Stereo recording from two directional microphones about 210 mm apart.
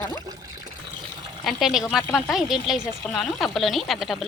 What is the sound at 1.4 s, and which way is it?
A woman's voice, centre (ahead or behind).